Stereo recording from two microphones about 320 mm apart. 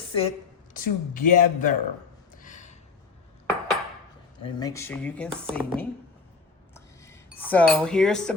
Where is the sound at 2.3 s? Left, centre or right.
Left.